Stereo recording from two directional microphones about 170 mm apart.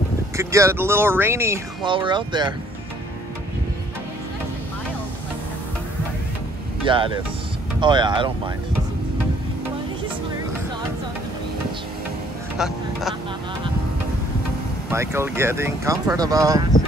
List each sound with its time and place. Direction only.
0.4 s speech: 15° right (ahead or behind)
1.8 s speech: 30° right (ahead or behind)
6.9 s speech: 30° right (ahead or behind)
12.5 s vehicle: centre (ahead or behind)
14.9 s speech: 15° right (ahead or behind)